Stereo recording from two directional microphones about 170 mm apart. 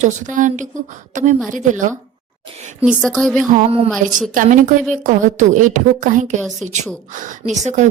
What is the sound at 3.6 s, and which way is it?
Speech, 35° right (ahead or behind).